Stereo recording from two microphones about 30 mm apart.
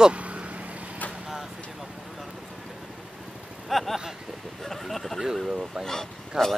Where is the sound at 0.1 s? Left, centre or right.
Right.